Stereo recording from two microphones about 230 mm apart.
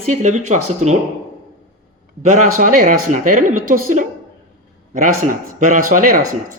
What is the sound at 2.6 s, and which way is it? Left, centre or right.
Speech, right.